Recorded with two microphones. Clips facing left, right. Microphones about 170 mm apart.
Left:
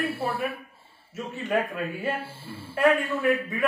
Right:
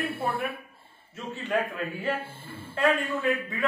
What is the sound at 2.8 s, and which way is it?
Speech, 20° left (ahead or behind).